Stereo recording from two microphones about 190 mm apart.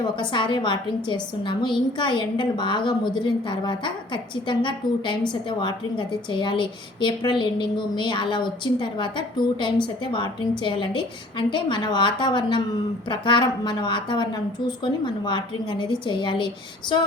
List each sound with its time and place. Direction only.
0.0 s a woman's voice: 25° left (ahead or behind)